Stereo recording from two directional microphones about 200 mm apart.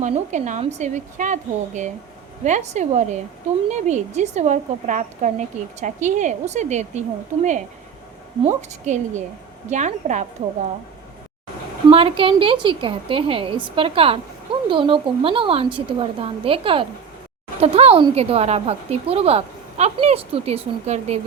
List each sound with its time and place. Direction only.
0.0 s a woman's voice: 35° right (ahead or behind)
8.4 s a woman's voice: 35° right (ahead or behind)
11.9 s a woman's voice: 25° right (ahead or behind)